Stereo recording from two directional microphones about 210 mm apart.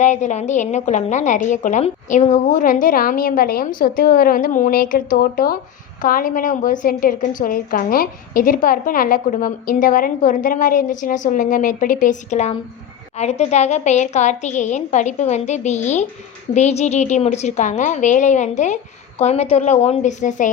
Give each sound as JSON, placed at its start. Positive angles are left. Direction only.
{"t": 0.0, "sound": "a woman's voice", "side_deg": 35}